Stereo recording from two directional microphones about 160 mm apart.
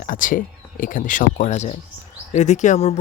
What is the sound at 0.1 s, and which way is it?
Speech, 55° left (ahead or behind).